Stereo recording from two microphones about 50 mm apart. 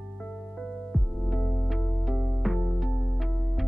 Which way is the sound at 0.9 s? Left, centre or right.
Centre.